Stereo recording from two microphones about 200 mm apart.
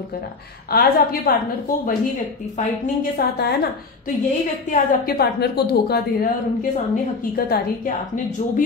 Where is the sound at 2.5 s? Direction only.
45° left (ahead or behind).